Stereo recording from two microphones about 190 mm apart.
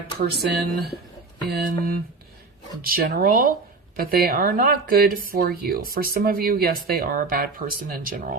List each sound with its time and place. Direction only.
0.2 s speech: 50° right (ahead or behind)